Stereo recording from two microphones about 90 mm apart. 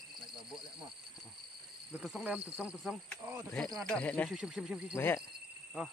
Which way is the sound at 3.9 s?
15° left (ahead or behind).